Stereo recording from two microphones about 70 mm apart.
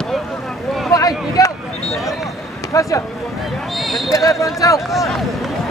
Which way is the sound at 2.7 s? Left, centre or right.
Left.